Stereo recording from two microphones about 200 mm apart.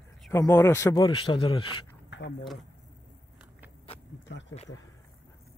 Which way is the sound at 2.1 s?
60° left (ahead or behind).